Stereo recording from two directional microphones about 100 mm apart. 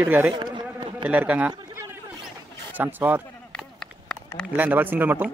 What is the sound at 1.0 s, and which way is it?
Speech, 15° right (ahead or behind).